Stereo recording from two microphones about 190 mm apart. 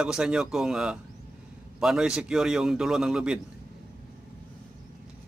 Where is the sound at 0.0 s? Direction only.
5° right (ahead or behind).